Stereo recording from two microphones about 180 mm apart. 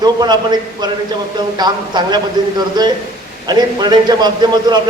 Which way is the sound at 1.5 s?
25° right (ahead or behind).